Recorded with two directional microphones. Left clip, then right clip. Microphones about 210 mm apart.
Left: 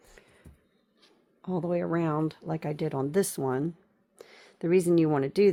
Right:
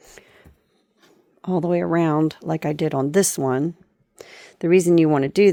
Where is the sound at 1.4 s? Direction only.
45° right (ahead or behind).